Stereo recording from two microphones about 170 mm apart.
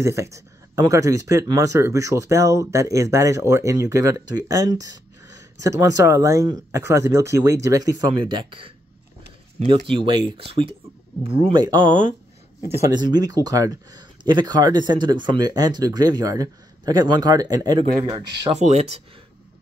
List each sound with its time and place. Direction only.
0.0 s speech: 15° right (ahead or behind)
18.5 s speech: 40° right (ahead or behind)